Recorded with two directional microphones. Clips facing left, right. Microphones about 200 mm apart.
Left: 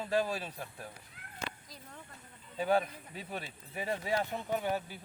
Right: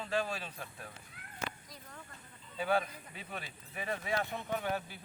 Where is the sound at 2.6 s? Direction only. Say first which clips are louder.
Left 3 dB; 40° left (ahead or behind).